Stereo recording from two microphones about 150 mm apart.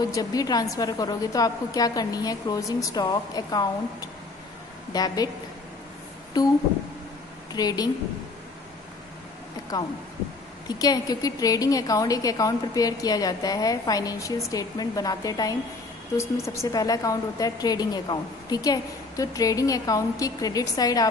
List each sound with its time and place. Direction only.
0.0 s a woman's voice: 25° left (ahead or behind)
6.4 s a woman's voice: 25° left (ahead or behind)
7.5 s a woman's voice: 25° left (ahead or behind)
9.7 s a woman's voice: 25° left (ahead or behind)